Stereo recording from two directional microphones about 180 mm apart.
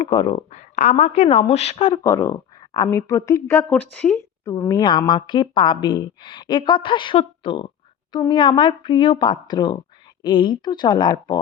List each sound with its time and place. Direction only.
0.0 s speech: 25° left (ahead or behind)
0.8 s a woman's voice: 40° left (ahead or behind)
2.0 s speech: 20° left (ahead or behind)
4.4 s speech: 20° left (ahead or behind)